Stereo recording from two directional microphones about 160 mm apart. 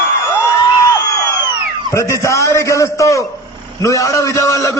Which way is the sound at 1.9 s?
20° left (ahead or behind).